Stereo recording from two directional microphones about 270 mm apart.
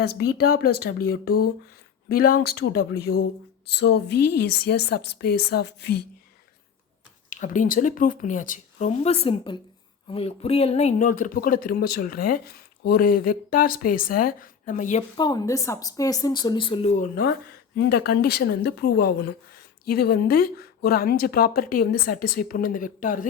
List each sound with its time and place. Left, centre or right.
0.5 s speech: left
7.3 s speech: left